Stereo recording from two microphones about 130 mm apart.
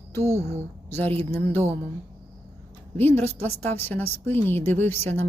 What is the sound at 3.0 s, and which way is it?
A woman's voice, 15° left (ahead or behind).